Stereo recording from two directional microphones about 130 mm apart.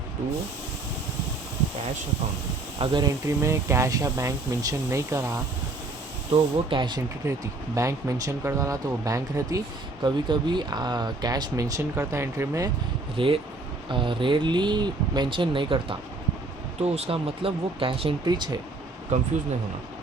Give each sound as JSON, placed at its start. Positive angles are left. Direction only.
{"t": 2.7, "sound": "speech", "side_deg": -35}
{"t": 3.2, "sound": "speech", "side_deg": -20}
{"t": 6.3, "sound": "speech", "side_deg": -40}
{"t": 7.2, "sound": "speech", "side_deg": -25}
{"t": 13.1, "sound": "speech", "side_deg": -40}
{"t": 16.8, "sound": "speech", "side_deg": -50}
{"t": 18.3, "sound": "speech", "side_deg": -35}